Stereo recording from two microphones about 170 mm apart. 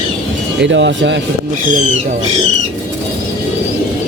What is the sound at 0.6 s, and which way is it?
Speech, 90° right.